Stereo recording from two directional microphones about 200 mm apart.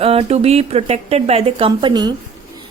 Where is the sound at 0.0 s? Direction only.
30° right (ahead or behind).